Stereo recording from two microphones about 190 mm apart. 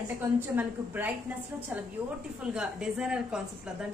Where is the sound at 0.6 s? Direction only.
10° right (ahead or behind).